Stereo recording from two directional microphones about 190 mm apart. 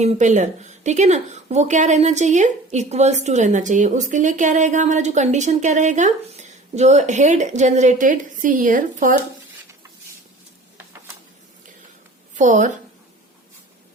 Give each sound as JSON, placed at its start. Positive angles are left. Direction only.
{"t": 0.0, "sound": "a woman's voice", "side_deg": -40}
{"t": 12.3, "sound": "a woman's voice", "side_deg": -40}